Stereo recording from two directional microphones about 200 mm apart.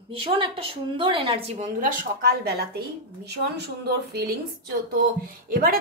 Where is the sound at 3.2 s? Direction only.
55° right (ahead or behind).